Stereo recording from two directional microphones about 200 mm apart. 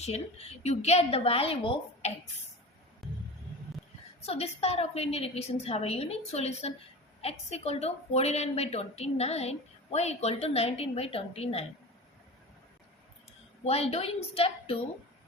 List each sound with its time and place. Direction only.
0.0 s a woman's voice: 30° left (ahead or behind)
3.0 s music: centre (ahead or behind)
4.2 s a woman's voice: 30° left (ahead or behind)
13.7 s a woman's voice: 30° left (ahead or behind)